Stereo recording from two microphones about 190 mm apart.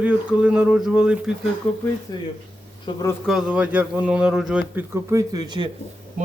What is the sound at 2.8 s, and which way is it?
Speech, 20° left (ahead or behind).